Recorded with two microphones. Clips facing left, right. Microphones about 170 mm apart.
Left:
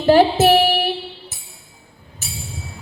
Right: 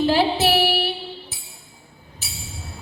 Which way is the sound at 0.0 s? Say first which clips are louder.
Left 6 dB; 50° left (ahead or behind).